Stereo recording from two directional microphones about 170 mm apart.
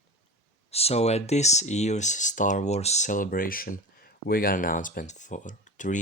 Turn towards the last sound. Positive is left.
turn(degrees=45)  # may be behind; listen again after turning